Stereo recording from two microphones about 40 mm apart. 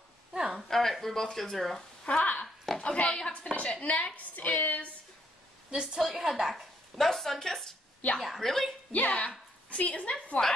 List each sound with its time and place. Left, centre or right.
0.3 s a sound: centre
0.6 s speech: centre
2.0 s a woman's voice: left
2.4 s a sound: centre
2.8 s a woman's voice: left
3.8 s a woman's voice: left
5.7 s a woman's voice: right
5.9 s a woman's voice: centre
6.5 s a sound: centre
7.1 s speech: centre
8.9 s a woman's voice: left
10.4 s speech: centre